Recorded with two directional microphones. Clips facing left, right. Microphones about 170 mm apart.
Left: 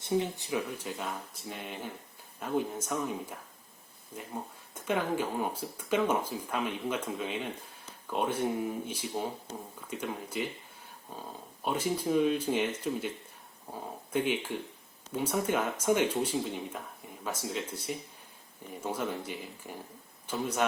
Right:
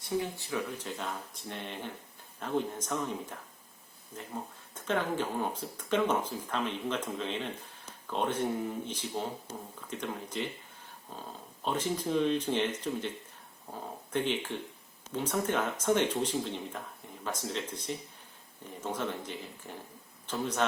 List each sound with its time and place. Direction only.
0.2 s speech: 20° left (ahead or behind)
0.9 s speech: 5° left (ahead or behind)
4.7 s speech: 10° left (ahead or behind)